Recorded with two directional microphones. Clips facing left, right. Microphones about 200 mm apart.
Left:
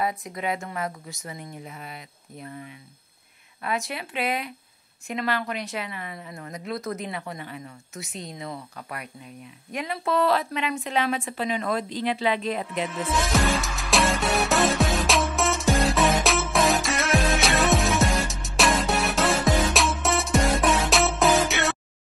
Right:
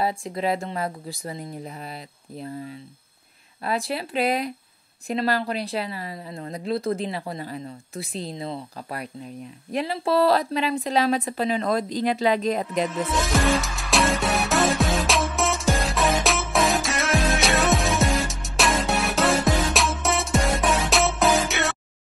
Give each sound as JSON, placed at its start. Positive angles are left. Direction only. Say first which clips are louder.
{"t": 0.0, "sound": "speech", "louder": "right 3 dB", "side_deg": -30}
{"t": 13.2, "sound": "music", "louder": "right 2 dB", "side_deg": 0}